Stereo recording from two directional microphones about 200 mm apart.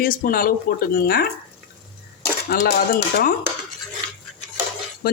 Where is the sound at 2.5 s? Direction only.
45° left (ahead or behind).